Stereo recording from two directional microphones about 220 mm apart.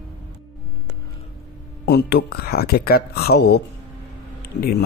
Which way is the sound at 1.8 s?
45° left (ahead or behind).